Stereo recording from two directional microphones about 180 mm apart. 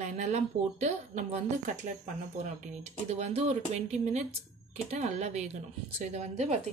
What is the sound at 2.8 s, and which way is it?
Speech, 35° right (ahead or behind).